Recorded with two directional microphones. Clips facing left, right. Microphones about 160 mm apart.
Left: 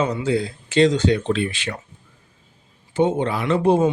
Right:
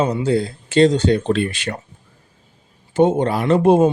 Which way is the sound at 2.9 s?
45° right (ahead or behind).